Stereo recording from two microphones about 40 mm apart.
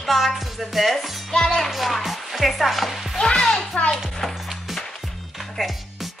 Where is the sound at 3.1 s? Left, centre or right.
Centre.